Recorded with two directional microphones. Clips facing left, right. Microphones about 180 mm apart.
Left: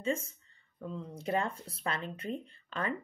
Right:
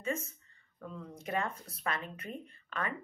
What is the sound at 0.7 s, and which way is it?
Speech, 30° left (ahead or behind).